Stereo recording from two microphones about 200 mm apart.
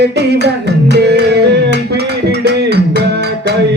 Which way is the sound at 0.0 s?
55° right (ahead or behind).